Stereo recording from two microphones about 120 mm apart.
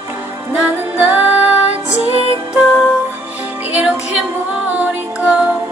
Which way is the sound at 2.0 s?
60° right (ahead or behind).